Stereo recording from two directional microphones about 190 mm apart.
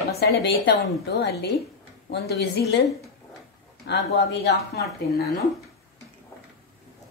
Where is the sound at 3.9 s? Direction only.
60° left (ahead or behind).